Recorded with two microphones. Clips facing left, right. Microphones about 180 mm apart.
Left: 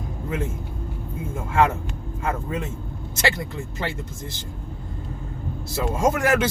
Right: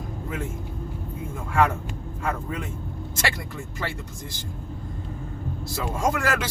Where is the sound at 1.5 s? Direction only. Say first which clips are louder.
Left 2 dB; 25° left (ahead or behind).